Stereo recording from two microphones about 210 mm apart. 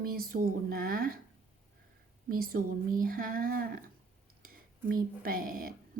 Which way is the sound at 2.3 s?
45° right (ahead or behind).